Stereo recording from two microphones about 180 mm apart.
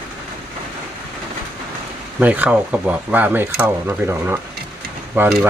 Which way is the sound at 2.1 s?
10° right (ahead or behind).